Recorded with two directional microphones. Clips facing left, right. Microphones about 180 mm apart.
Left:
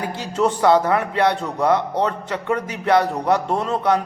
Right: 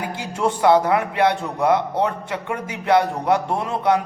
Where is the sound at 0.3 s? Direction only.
15° right (ahead or behind).